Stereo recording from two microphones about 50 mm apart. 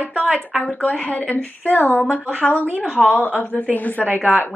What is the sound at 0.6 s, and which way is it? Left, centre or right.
A woman's voice, left.